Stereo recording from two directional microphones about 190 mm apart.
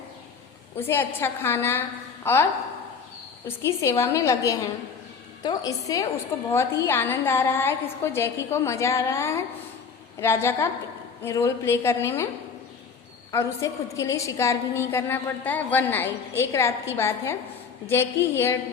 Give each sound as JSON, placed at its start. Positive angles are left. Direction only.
{"t": 0.8, "sound": "a woman's voice", "side_deg": 10}
{"t": 13.3, "sound": "a woman's voice", "side_deg": 15}